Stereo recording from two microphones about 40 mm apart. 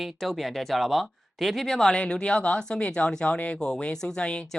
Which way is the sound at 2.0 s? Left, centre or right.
Left.